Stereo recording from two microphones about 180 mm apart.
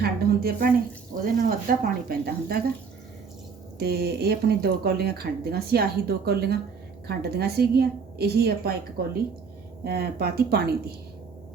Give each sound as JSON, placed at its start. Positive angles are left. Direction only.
{"t": 0.0, "sound": "speech", "side_deg": -60}
{"t": 3.8, "sound": "speech", "side_deg": -60}
{"t": 9.8, "sound": "speech", "side_deg": -60}